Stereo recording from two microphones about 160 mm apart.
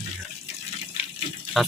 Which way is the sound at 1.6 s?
Centre (ahead or behind).